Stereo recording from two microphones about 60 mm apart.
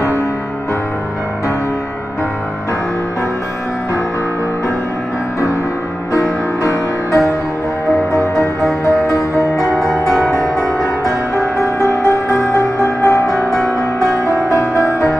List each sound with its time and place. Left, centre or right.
6.6 s music: left
8.8 s music: left
11.3 s music: left
14.8 s music: left